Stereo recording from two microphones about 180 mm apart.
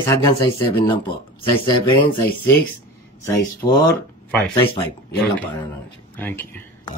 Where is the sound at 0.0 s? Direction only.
15° left (ahead or behind).